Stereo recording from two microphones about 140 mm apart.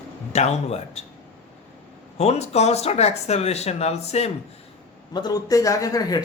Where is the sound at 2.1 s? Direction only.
50° left (ahead or behind).